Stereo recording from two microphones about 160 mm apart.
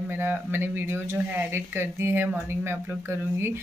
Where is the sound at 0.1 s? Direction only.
15° right (ahead or behind).